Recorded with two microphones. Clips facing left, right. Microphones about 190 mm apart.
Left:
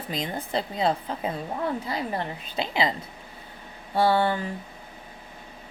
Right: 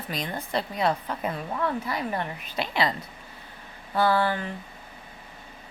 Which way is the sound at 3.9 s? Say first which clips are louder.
Left 1 dB; 25° left (ahead or behind).